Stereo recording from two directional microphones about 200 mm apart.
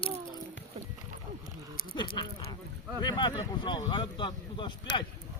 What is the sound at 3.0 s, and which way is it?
Speech, 25° left (ahead or behind).